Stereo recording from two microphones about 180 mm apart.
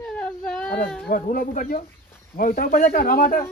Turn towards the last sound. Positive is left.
turn(degrees=50)  # may be behind; listen again after turning